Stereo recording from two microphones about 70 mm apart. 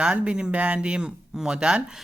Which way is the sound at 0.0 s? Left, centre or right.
Centre.